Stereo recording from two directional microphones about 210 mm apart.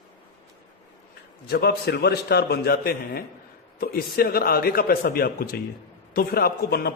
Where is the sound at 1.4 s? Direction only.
50° left (ahead or behind).